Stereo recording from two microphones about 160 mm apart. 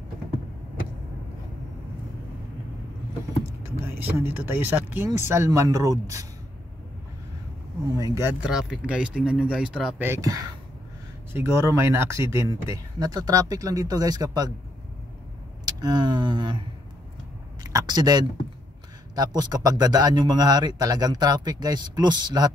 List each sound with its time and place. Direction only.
3.8 s speech: 15° right (ahead or behind)
8.0 s speech: 20° right (ahead or behind)
8.5 s speech: 5° right (ahead or behind)
9.9 s speech: 15° right (ahead or behind)
15.6 s speech: 25° right (ahead or behind)
17.6 s speech: 25° right (ahead or behind)